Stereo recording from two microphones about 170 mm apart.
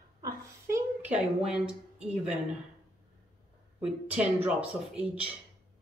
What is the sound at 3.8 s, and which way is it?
Speech, 5° right (ahead or behind).